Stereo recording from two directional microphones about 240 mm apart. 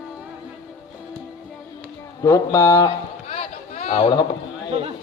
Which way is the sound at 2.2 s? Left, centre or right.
Centre.